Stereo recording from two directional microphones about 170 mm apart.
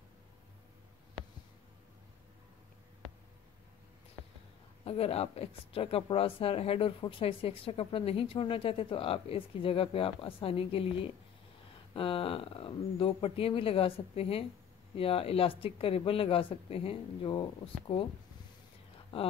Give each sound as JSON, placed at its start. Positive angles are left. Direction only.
{"t": 4.8, "sound": "speech", "side_deg": 35}
{"t": 11.9, "sound": "speech", "side_deg": 30}